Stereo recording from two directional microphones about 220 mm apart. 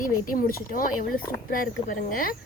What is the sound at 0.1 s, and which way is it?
A woman's voice, 40° left (ahead or behind).